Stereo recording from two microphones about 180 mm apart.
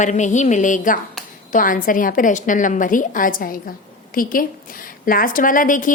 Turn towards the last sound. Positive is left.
turn(degrees=45)  # may be behind; listen again after turning